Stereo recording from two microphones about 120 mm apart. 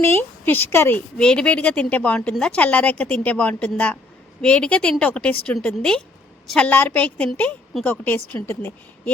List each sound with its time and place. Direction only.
0.2 s a woman's voice: 15° left (ahead or behind)